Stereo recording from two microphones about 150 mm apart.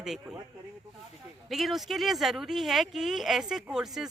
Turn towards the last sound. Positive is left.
turn(degrees=-5)  # may be behind; listen again after turning